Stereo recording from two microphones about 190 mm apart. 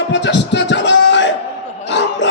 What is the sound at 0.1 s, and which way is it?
Music, 70° left (ahead or behind).